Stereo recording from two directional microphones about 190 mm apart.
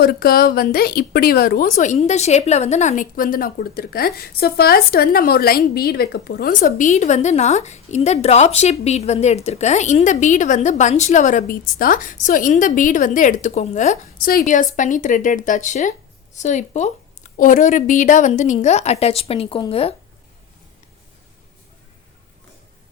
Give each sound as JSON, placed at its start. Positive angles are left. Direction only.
{"t": 0.0, "sound": "a woman's voice", "side_deg": 50}
{"t": 6.6, "sound": "a woman's voice", "side_deg": 40}